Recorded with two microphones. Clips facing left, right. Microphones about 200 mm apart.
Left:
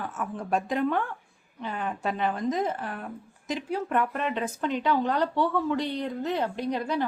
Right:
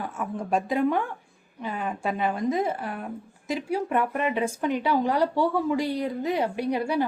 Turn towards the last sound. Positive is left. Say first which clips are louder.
# right 3 dB
turn(degrees=-10)  # may be behind; listen again after turning